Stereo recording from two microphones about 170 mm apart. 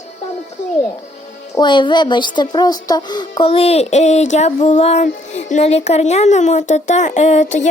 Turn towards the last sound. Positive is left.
turn(degrees=45)  # may be behind; listen again after turning